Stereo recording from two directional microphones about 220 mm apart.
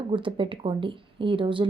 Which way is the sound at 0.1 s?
20° right (ahead or behind).